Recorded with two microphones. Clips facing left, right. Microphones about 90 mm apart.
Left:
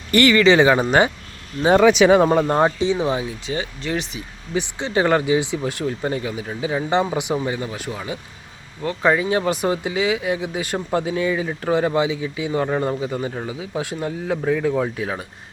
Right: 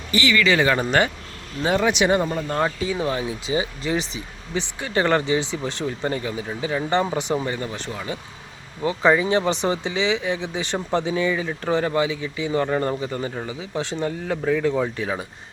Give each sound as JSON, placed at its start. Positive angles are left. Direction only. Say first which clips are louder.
{"t": 0.1, "sound": "speech", "louder": "left 6 dB", "side_deg": 60}
{"t": 0.3, "sound": "speech", "louder": "left 4 dB", "side_deg": 25}
{"t": 2.2, "sound": "speech", "louder": "left 9 dB", "side_deg": 90}
{"t": 2.5, "sound": "speech", "louder": "left 5 dB", "side_deg": 25}
{"t": 3.2, "sound": "speech", "louder": "right 2 dB", "side_deg": -5}
{"t": 4.5, "sound": "speech", "louder": "left 3 dB", "side_deg": 15}
{"t": 5.8, "sound": "speech", "louder": "left 2 dB", "side_deg": 0}
{"t": 8.8, "sound": "speech", "louder": "right 1 dB", "side_deg": 0}